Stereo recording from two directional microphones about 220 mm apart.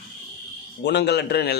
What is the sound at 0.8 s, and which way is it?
Speech, 50° left (ahead or behind).